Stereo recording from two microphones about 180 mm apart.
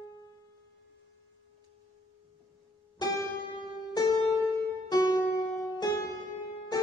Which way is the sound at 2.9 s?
20° left (ahead or behind).